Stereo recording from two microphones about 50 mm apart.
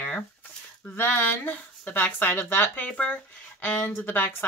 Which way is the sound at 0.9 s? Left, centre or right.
Left.